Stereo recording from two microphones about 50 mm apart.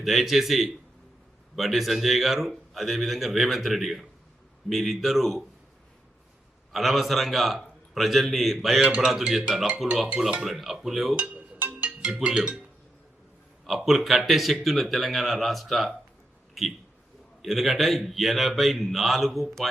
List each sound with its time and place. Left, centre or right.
0.0 s speech: centre
6.7 s speech: centre
11.2 s music: right
11.9 s music: right
13.7 s speech: centre
17.4 s speech: centre